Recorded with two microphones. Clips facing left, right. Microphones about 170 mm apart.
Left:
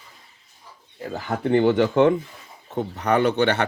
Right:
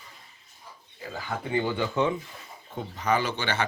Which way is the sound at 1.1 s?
60° left (ahead or behind).